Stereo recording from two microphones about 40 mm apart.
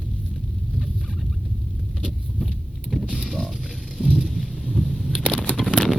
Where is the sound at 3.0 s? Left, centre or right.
Right.